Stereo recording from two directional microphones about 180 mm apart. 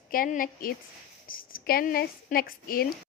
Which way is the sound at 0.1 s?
50° left (ahead or behind).